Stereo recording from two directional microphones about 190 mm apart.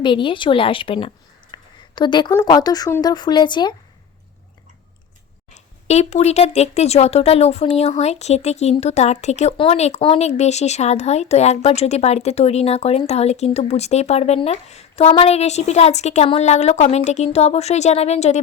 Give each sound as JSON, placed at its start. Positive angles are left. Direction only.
{"t": 0.0, "sound": "a woman's voice", "side_deg": 25}
{"t": 5.5, "sound": "speech", "side_deg": 35}